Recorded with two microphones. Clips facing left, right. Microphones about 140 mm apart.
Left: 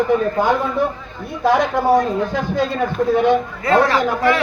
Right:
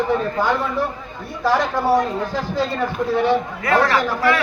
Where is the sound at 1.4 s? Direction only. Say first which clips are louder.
Left 3 dB; 20° left (ahead or behind).